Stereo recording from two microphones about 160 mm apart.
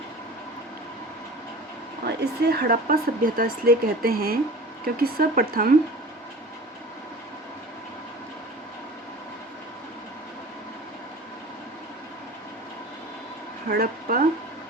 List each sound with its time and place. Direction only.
2.0 s speech: 90° right; by 5.7 s 65° right (ahead or behind)
13.7 s speech: 65° right (ahead or behind)